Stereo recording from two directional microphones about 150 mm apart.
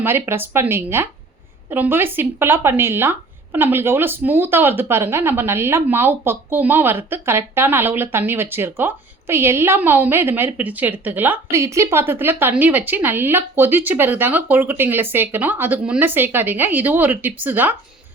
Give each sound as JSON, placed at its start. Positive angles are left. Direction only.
{"t": 0.0, "sound": "speech", "side_deg": -15}